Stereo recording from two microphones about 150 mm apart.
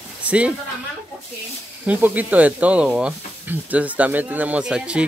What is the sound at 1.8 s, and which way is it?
Speech, 10° right (ahead or behind).